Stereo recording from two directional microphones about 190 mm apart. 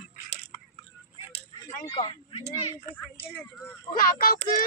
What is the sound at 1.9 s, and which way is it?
Speech, 25° left (ahead or behind).